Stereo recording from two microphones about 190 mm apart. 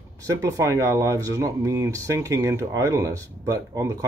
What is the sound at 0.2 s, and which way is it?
Speech, 15° right (ahead or behind).